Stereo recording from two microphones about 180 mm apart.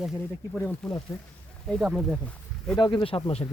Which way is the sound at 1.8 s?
5° right (ahead or behind).